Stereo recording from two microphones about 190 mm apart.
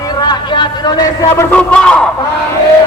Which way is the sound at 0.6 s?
20° left (ahead or behind).